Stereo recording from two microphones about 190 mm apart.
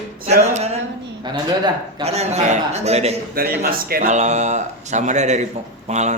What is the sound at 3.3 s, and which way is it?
Speech, 50° right (ahead or behind).